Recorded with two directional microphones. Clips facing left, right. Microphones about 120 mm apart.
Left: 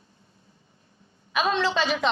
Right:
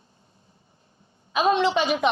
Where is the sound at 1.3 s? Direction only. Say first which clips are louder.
Right 4 dB; 20° right (ahead or behind).